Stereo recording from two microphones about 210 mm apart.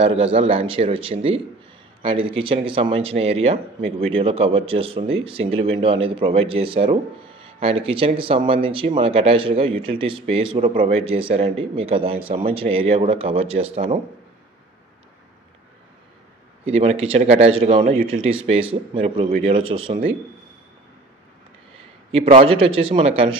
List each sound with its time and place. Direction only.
0.0 s speech: 25° right (ahead or behind)
16.6 s speech: 30° right (ahead or behind)
22.1 s speech: 25° right (ahead or behind)